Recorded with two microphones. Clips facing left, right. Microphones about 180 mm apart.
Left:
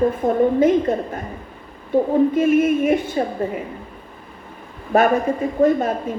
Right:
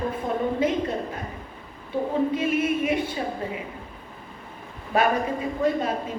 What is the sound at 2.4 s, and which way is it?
Speech, 45° left (ahead or behind).